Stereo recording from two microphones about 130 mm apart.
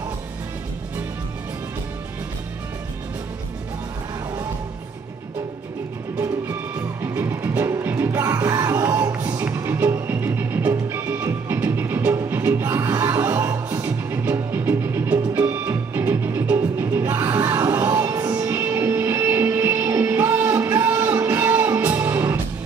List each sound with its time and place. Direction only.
7.0 s music: 20° right (ahead or behind)